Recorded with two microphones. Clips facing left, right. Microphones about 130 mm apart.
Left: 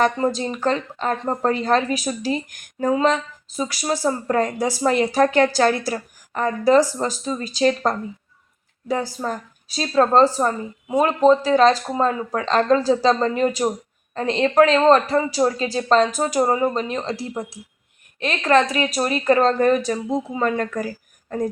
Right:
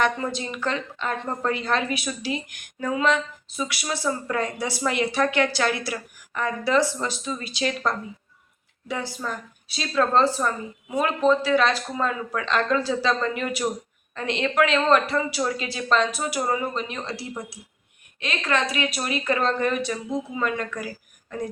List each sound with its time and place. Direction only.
0.0 s speech: 40° left (ahead or behind)